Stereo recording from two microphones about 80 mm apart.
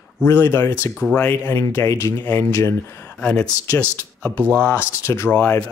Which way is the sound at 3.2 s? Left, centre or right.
Centre.